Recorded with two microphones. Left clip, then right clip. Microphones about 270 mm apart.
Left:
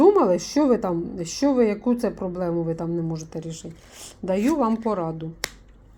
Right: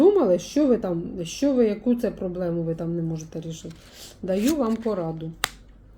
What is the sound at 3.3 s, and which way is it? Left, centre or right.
Speech, left.